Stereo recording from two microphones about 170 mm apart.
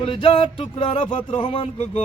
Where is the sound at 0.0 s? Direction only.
30° left (ahead or behind).